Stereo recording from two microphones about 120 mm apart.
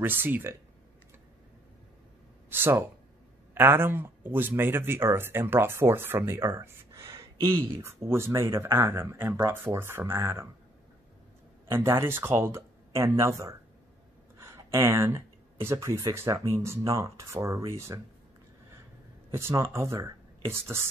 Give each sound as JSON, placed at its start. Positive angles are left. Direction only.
{"t": 0.0, "sound": "speech", "side_deg": -15}
{"t": 2.5, "sound": "speech", "side_deg": -20}
{"t": 11.7, "sound": "speech", "side_deg": -20}
{"t": 19.3, "sound": "speech", "side_deg": -20}